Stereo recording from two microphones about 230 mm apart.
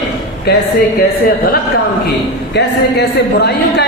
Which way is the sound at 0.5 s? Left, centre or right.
Left.